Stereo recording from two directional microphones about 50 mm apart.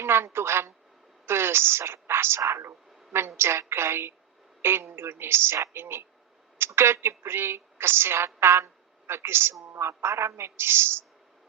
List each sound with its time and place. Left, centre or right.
0.0 s a woman's voice: right
1.3 s a sound: right
2.4 s a woman's voice: right